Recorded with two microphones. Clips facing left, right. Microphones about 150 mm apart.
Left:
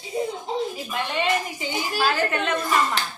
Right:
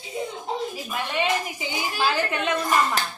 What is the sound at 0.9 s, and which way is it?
A woman's voice, 5° right (ahead or behind).